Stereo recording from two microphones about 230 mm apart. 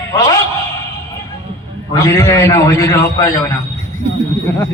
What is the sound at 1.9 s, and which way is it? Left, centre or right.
A man's voice, centre.